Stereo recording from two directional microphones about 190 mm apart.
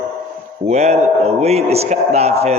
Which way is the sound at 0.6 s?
35° right (ahead or behind).